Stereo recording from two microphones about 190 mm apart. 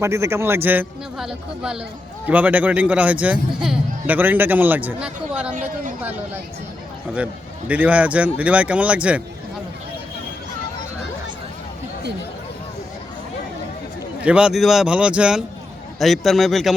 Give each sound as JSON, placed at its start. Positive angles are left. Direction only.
{"t": 0.0, "sound": "a man's voice", "side_deg": -15}
{"t": 7.7, "sound": "a man's voice", "side_deg": -5}
{"t": 14.2, "sound": "a man's voice", "side_deg": -5}